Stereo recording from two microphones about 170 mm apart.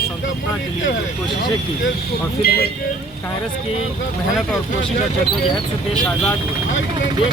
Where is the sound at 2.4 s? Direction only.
65° left (ahead or behind).